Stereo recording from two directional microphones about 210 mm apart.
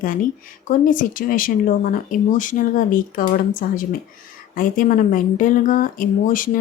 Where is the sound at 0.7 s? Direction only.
40° left (ahead or behind).